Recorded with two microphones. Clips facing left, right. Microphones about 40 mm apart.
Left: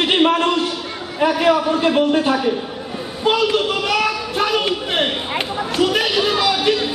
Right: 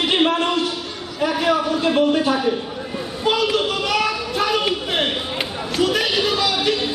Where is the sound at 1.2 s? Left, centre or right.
Left.